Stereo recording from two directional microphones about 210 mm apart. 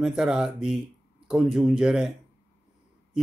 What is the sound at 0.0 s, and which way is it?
Speech, 5° right (ahead or behind).